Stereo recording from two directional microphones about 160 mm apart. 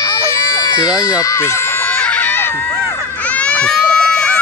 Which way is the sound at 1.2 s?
20° left (ahead or behind).